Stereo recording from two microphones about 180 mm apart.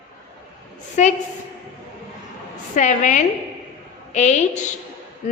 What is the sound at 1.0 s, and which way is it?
Speech, 40° left (ahead or behind).